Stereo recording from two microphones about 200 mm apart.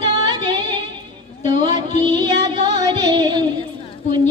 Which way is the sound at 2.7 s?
20° right (ahead or behind).